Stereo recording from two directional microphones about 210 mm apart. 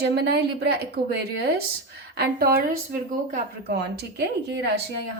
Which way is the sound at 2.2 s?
45° right (ahead or behind).